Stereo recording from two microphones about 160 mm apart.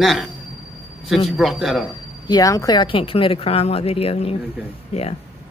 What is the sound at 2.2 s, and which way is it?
Speech, 25° left (ahead or behind).